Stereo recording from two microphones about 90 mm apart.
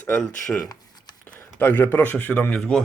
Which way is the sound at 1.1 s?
50° left (ahead or behind).